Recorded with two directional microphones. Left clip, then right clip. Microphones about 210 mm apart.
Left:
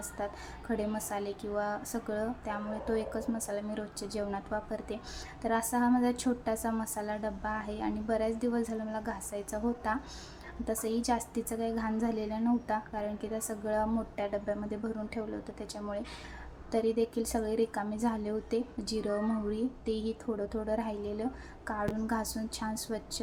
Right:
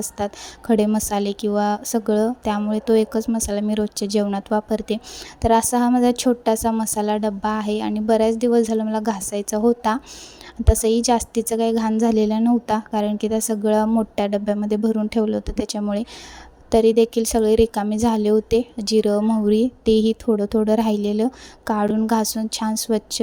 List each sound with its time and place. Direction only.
0.7 s a woman's voice: 40° right (ahead or behind)